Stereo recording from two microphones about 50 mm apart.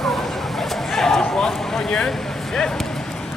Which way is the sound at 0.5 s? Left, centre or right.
Centre.